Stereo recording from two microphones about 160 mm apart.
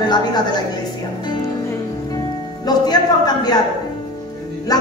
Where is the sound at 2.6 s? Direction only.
25° left (ahead or behind).